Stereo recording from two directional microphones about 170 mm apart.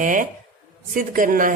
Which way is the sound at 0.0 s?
50° right (ahead or behind).